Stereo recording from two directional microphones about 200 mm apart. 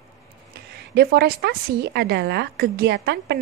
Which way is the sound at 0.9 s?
55° right (ahead or behind).